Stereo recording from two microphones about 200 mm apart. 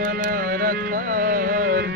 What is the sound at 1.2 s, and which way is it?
Music, 45° right (ahead or behind).